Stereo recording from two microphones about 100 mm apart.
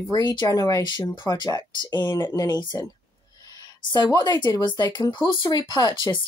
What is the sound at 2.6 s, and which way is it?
Speech, 50° left (ahead or behind).